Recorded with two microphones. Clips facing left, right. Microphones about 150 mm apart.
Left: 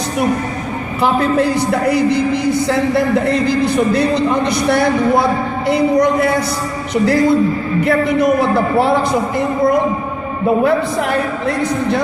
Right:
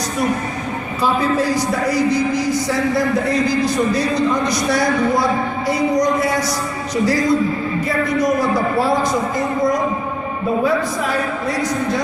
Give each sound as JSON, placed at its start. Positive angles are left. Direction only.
{"t": 1.0, "sound": "a man's voice", "side_deg": 60}
{"t": 11.4, "sound": "a man's voice", "side_deg": 60}